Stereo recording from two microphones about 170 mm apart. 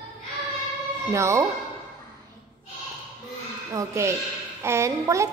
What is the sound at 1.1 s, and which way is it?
Speech, 15° right (ahead or behind).